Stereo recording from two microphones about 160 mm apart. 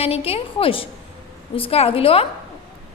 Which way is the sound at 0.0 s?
40° left (ahead or behind).